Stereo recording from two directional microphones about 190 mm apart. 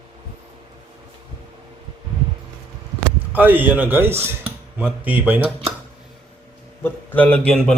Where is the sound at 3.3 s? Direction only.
10° right (ahead or behind).